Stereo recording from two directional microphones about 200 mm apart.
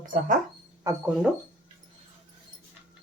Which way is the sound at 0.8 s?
15° right (ahead or behind).